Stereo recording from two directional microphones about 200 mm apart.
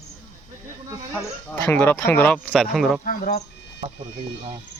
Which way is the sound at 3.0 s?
45° left (ahead or behind).